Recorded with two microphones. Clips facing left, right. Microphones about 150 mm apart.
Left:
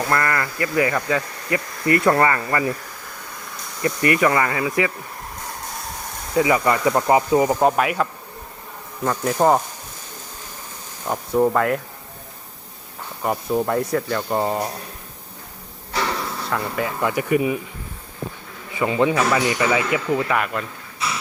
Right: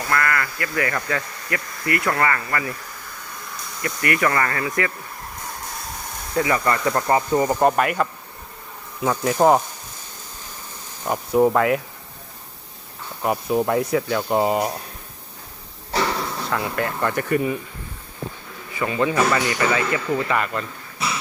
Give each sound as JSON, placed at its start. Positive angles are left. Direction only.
{"t": 0.1, "sound": "speech", "side_deg": 25}
{"t": 3.8, "sound": "speech", "side_deg": 25}
{"t": 6.3, "sound": "speech", "side_deg": 15}
{"t": 11.0, "sound": "speech", "side_deg": -5}
{"t": 13.2, "sound": "speech", "side_deg": -5}
{"t": 16.5, "sound": "speech", "side_deg": 0}
{"t": 18.7, "sound": "a man's voice", "side_deg": 20}